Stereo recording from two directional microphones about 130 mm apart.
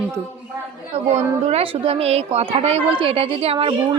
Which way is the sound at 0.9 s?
55° right (ahead or behind).